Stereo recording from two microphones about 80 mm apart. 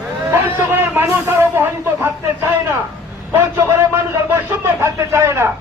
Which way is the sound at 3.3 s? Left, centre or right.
Right.